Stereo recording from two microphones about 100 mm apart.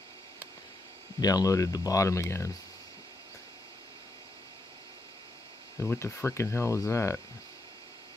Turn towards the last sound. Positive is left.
turn(degrees=25)  # may be behind; listen again after turning